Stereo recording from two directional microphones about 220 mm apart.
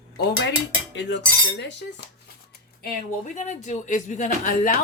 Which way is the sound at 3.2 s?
35° left (ahead or behind).